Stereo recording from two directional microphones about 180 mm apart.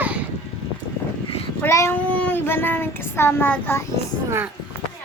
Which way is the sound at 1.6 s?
15° left (ahead or behind).